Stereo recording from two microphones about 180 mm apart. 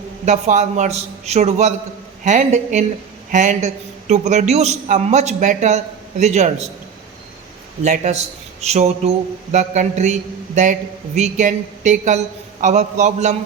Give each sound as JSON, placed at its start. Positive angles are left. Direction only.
{"t": 0.3, "sound": "a man's voice", "side_deg": -40}
{"t": 7.8, "sound": "a man's voice", "side_deg": -40}